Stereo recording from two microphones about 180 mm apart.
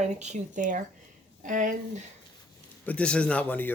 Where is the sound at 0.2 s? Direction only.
40° right (ahead or behind).